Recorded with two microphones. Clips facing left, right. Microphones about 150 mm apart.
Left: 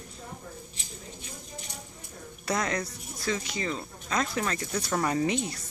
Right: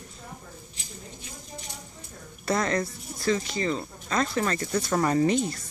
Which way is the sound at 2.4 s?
Centre (ahead or behind).